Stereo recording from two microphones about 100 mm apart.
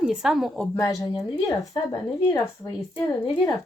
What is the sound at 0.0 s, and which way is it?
Speech, 5° right (ahead or behind).